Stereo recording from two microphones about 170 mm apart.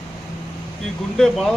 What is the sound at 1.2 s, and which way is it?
Speech, centre (ahead or behind).